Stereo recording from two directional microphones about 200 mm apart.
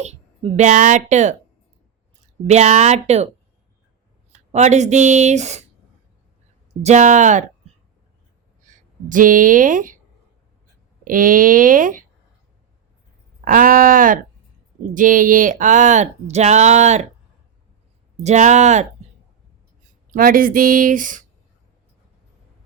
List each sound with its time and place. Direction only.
0.0 s speech: 35° right (ahead or behind)
2.5 s speech: 35° right (ahead or behind)
4.3 s speech: 35° right (ahead or behind)
6.8 s speech: 35° right (ahead or behind)
8.6 s speech: 40° right (ahead or behind)
11.0 s speech: 45° right (ahead or behind)
13.4 s speech: 45° right (ahead or behind)
18.2 s speech: 35° right (ahead or behind)
20.1 s speech: 45° right (ahead or behind)